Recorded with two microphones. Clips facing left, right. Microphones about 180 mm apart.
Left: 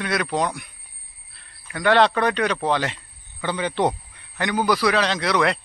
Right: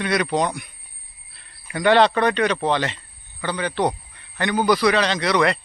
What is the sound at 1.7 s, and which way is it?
A man's voice, centre (ahead or behind).